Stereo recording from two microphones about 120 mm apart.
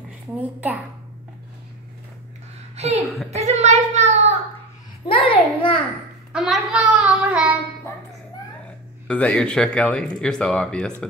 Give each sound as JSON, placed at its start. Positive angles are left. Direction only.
{"t": 0.4, "sound": "a woman's voice", "side_deg": -15}
{"t": 2.7, "sound": "a sound", "side_deg": -65}
{"t": 3.3, "sound": "child singing", "side_deg": -70}
{"t": 5.0, "sound": "a sound", "side_deg": 50}
{"t": 6.3, "sound": "child singing", "side_deg": -5}
{"t": 9.0, "sound": "speech", "side_deg": 10}